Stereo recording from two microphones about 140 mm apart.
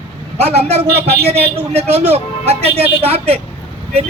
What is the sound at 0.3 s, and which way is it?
A man's voice, 50° right (ahead or behind).